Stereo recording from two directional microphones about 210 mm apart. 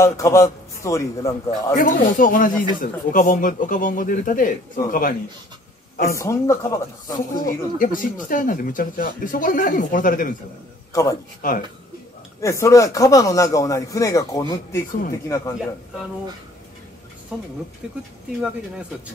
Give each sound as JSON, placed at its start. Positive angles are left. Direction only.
{"t": 0.0, "sound": "a man's voice", "side_deg": 15}
{"t": 1.8, "sound": "speech", "side_deg": 40}
{"t": 6.0, "sound": "a man's voice", "side_deg": 15}
{"t": 7.3, "sound": "speech", "side_deg": 40}
{"t": 10.9, "sound": "a man's voice", "side_deg": 15}
{"t": 11.4, "sound": "speech", "side_deg": 40}
{"t": 12.4, "sound": "a man's voice", "side_deg": 15}
{"t": 17.3, "sound": "speech", "side_deg": -5}